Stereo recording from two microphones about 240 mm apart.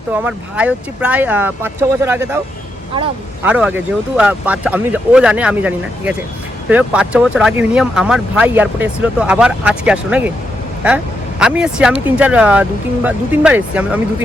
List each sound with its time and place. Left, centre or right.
0.1 s speech: centre
3.4 s speech: centre